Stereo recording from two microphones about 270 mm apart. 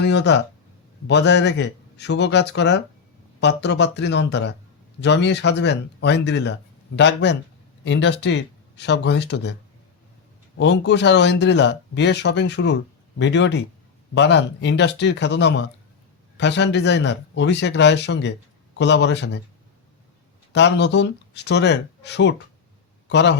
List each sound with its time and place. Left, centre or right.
0.0 s speech: left
10.6 s speech: left
20.5 s speech: left